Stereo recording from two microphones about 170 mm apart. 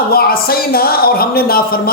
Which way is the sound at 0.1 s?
65° left (ahead or behind).